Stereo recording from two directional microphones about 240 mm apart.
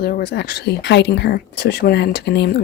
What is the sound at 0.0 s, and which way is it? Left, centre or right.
Speech, left.